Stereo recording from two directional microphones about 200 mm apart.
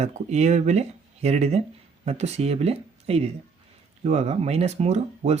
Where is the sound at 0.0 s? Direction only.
35° right (ahead or behind).